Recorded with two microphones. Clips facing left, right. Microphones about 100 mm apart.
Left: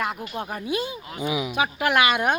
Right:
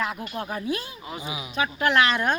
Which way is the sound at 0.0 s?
5° left (ahead or behind).